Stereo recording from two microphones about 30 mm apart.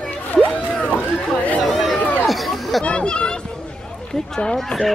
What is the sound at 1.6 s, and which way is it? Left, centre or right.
Run, centre.